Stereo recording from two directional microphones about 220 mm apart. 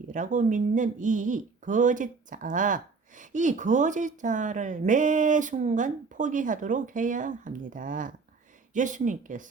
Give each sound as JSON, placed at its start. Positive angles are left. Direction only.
{"t": 0.1, "sound": "speech", "side_deg": -35}